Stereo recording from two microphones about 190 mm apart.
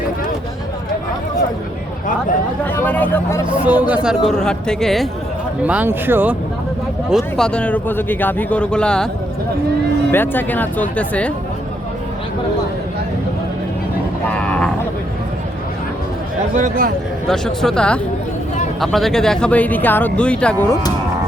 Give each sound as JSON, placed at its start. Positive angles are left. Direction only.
{"t": 2.6, "sound": "speech", "side_deg": 10}
{"t": 3.7, "sound": "speech", "side_deg": -10}
{"t": 5.6, "sound": "speech", "side_deg": -10}
{"t": 7.1, "sound": "speech", "side_deg": 0}
{"t": 10.1, "sound": "speech", "side_deg": 10}
{"t": 14.3, "sound": "a sound", "side_deg": 5}
{"t": 16.6, "sound": "speech", "side_deg": -45}
{"t": 17.2, "sound": "speech", "side_deg": 5}